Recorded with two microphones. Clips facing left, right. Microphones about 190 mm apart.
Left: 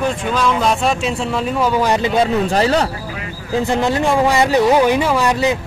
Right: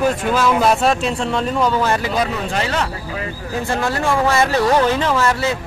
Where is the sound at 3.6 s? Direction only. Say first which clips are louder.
Left 3 dB; 20° left (ahead or behind).